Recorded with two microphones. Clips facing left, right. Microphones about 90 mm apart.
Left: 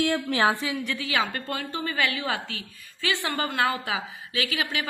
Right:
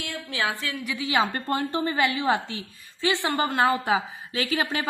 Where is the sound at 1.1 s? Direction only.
30° right (ahead or behind).